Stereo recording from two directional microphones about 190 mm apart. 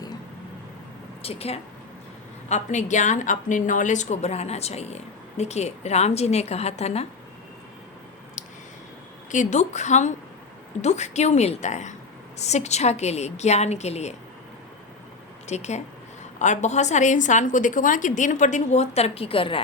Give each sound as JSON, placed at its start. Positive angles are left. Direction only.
{"t": 1.2, "sound": "a woman's voice", "side_deg": 30}
{"t": 9.3, "sound": "a woman's voice", "side_deg": 40}
{"t": 15.4, "sound": "a woman's voice", "side_deg": 35}